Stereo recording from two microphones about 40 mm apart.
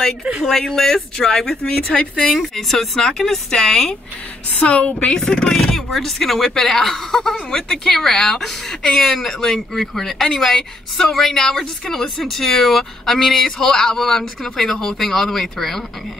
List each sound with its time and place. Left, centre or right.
0.5 s a woman's voice: centre
1.6 s a woman's voice: left
2.5 s a woman's voice: centre
4.6 s a woman's voice: left; by 15.8 s centre